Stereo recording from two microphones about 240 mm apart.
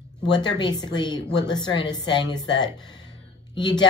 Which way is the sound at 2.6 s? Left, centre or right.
Centre.